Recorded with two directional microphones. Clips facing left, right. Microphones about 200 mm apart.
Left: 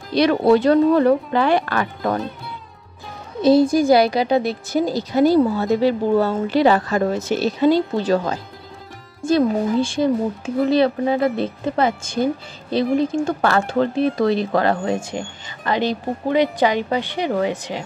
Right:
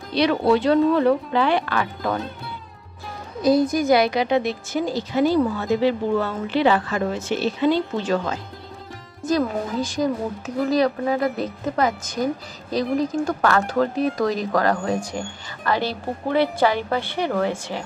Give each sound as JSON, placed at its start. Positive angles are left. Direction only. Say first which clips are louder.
{"t": 0.1, "sound": "speech", "louder": "left 4 dB", "side_deg": 45}
{"t": 3.4, "sound": "a woman's voice", "louder": "left 4 dB", "side_deg": 30}